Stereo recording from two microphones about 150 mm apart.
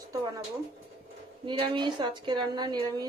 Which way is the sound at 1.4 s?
35° right (ahead or behind).